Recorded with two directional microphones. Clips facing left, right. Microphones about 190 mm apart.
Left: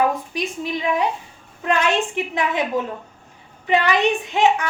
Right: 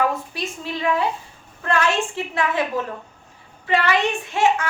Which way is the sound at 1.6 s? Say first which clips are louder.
Left 1 dB; 15° left (ahead or behind).